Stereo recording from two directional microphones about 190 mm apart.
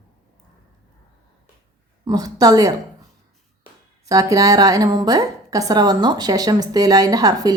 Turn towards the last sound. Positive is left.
turn(degrees=-20)  # may be behind; listen again after turning